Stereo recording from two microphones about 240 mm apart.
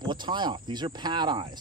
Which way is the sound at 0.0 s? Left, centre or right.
Centre.